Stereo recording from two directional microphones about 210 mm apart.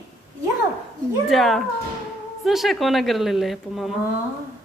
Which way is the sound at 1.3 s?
Centre (ahead or behind).